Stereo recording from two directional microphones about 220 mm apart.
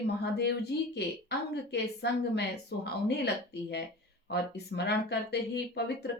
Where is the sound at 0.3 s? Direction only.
50° left (ahead or behind).